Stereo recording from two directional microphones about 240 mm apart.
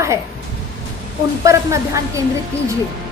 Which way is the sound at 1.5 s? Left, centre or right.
Centre.